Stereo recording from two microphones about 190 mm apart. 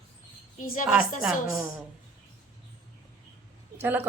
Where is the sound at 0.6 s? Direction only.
45° left (ahead or behind).